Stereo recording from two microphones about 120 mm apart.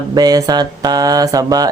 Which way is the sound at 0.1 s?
35° right (ahead or behind).